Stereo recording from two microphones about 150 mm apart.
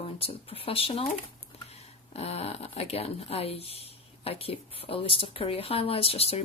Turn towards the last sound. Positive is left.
turn(degrees=40)  # may be behind; listen again after turning